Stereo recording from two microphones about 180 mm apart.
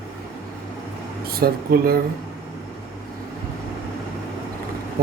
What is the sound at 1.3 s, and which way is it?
Speech, 55° right (ahead or behind).